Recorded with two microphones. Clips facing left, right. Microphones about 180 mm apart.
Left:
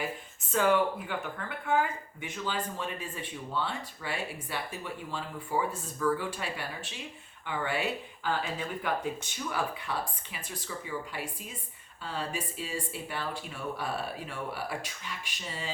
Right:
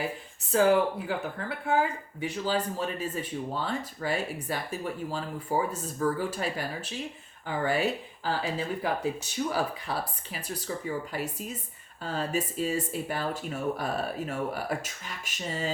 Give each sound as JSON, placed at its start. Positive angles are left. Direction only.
{"t": 0.5, "sound": "speech", "side_deg": -35}